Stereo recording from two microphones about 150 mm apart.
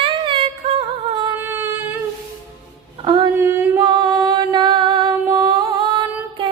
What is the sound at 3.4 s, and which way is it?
Music, 15° right (ahead or behind).